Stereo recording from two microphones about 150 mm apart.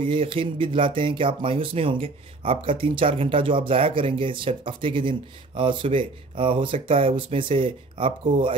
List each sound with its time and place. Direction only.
0.0 s speech: 35° right (ahead or behind)